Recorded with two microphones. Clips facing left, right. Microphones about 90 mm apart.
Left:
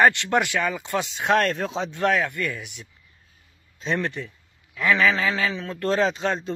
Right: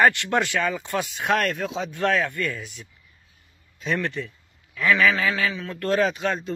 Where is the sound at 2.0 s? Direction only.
20° left (ahead or behind).